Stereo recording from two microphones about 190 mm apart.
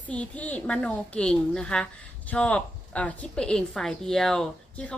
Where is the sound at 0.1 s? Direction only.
5° left (ahead or behind).